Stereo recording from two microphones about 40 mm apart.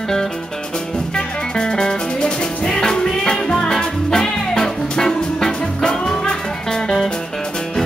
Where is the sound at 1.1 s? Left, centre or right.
Left.